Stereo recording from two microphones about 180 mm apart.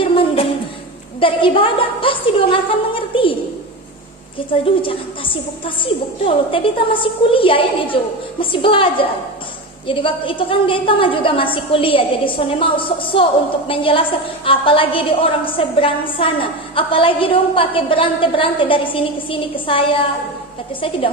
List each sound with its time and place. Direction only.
0.0 s music: 30° left (ahead or behind)
1.2 s a woman's voice: 30° left (ahead or behind)
4.4 s a woman's voice: 30° left (ahead or behind)